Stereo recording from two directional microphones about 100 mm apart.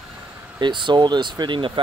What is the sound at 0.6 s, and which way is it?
Speech, 50° right (ahead or behind).